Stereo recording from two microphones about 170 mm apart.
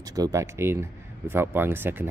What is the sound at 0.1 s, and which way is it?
Speech, 20° right (ahead or behind).